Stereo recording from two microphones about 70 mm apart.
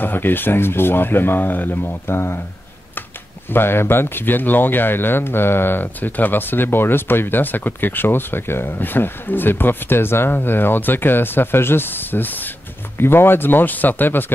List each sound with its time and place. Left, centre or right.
0.0 s speech: left
3.4 s speech: left